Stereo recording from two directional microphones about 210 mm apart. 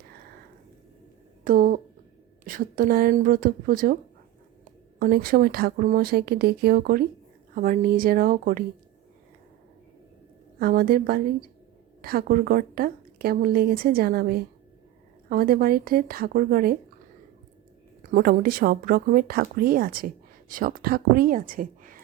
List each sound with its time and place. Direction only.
1.5 s a woman's voice: 40° right (ahead or behind)
4.9 s a woman's voice: 45° right (ahead or behind)
10.6 s a woman's voice: 45° right (ahead or behind)
18.0 s a woman's voice: 40° right (ahead or behind)